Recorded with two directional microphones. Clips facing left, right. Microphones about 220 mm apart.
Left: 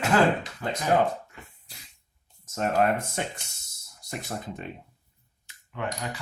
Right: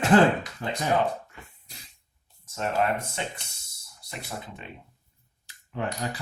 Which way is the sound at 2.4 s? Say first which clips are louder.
Left 3 dB; 45° left (ahead or behind).